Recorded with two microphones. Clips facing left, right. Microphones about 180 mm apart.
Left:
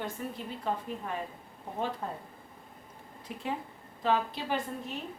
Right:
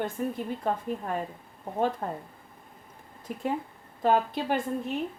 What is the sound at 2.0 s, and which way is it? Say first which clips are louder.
Speech: right 4 dB; 50° right (ahead or behind).